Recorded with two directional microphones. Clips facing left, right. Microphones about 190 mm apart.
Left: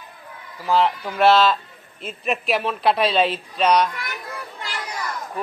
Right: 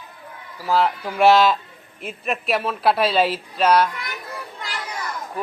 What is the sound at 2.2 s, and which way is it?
Speech, centre (ahead or behind).